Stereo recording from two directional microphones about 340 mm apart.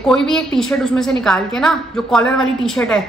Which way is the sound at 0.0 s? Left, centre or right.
Centre.